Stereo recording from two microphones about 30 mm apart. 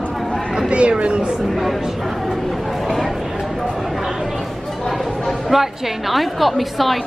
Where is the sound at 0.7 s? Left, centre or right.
Right.